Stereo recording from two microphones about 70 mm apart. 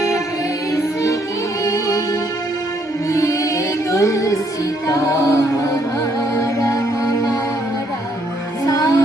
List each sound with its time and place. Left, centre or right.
1.6 s music: left
3.1 s music: left
8.6 s music: left